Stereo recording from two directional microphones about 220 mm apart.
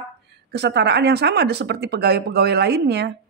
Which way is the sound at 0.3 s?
50° right (ahead or behind).